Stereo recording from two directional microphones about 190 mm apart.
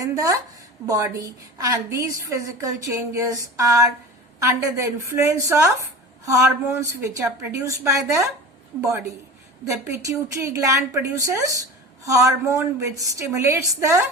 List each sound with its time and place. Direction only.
0.9 s a woman's voice: 15° right (ahead or behind)
9.6 s a woman's voice: 15° right (ahead or behind)